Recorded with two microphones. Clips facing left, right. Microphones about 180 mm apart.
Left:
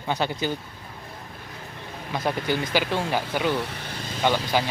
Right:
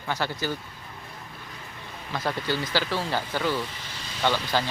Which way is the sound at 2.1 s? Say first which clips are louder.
Left 3 dB; 15° left (ahead or behind).